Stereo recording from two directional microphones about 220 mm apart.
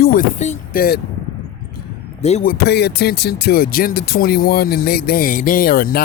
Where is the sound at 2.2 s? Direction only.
35° left (ahead or behind).